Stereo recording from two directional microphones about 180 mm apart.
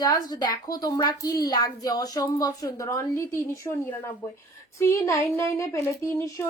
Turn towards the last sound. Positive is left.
turn(degrees=15)  # may be behind; listen again after turning